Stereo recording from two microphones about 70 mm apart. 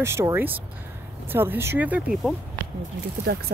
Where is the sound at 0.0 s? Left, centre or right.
Right.